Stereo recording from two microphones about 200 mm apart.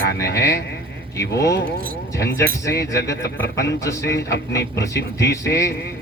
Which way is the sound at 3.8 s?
15° left (ahead or behind).